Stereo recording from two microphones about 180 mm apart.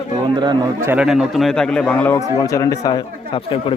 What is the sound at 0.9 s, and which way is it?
A man's voice, 5° right (ahead or behind).